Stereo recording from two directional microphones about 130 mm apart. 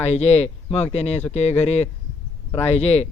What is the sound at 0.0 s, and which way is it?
Speech, 55° left (ahead or behind).